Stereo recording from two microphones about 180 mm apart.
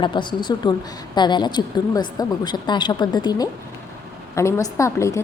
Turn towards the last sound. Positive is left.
turn(degrees=15)  # may be behind; listen again after turning